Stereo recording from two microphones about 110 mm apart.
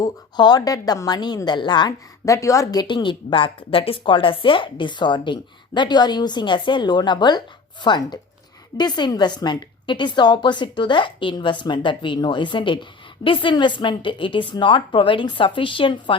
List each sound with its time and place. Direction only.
0.0 s a woman's voice: 40° left (ahead or behind)
2.2 s a woman's voice: 30° left (ahead or behind)
2.8 s a woman's voice: 45° left (ahead or behind)